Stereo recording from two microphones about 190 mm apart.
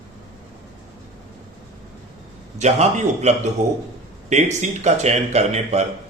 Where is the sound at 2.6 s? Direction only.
35° right (ahead or behind).